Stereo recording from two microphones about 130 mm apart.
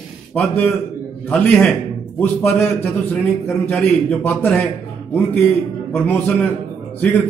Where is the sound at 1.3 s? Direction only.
10° left (ahead or behind).